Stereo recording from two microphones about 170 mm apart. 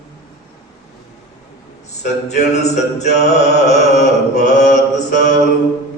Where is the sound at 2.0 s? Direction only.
45° left (ahead or behind).